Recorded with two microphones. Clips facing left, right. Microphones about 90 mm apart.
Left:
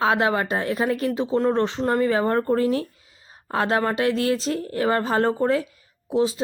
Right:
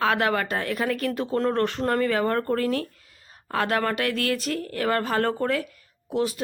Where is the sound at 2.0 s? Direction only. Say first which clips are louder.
Left 3 dB; 25° left (ahead or behind).